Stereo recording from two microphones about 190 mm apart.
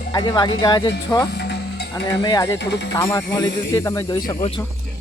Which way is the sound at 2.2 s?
20° left (ahead or behind).